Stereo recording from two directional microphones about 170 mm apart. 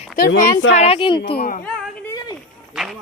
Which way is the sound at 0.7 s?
40° left (ahead or behind).